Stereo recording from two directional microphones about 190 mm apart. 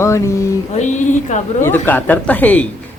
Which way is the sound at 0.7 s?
40° left (ahead or behind).